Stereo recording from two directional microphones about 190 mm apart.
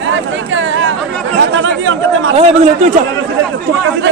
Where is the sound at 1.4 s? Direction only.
85° right.